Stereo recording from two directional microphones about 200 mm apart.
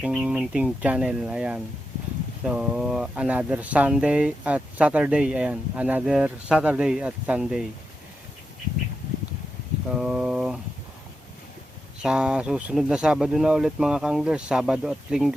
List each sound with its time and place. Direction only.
0.0 s speech: 5° right (ahead or behind)
9.9 s speech: 5° right (ahead or behind)
12.0 s speech: 5° right (ahead or behind)